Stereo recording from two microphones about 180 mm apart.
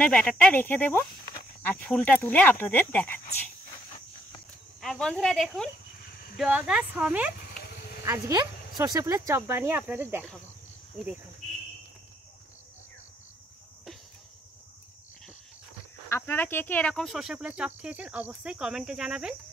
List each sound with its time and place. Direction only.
0.0 s speech: 5° left (ahead or behind)
4.8 s speech: 5° left (ahead or behind)
7.5 s a sound: 55° left (ahead or behind)
8.0 s speech: 20° right (ahead or behind)
16.1 s speech: 10° left (ahead or behind); by 19.3 s 5° right (ahead or behind)